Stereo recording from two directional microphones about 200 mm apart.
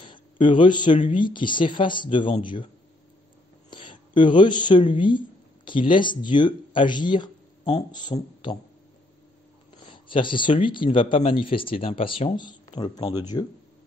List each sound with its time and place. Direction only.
0.0 s a sound: 25° left (ahead or behind)
1.1 s speech: 25° left (ahead or behind)
3.7 s speech: 25° left (ahead or behind)
9.8 s speech: 25° left (ahead or behind)